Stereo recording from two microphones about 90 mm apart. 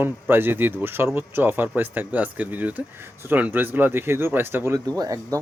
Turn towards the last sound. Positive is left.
turn(degrees=-40)  # may be behind; listen again after turning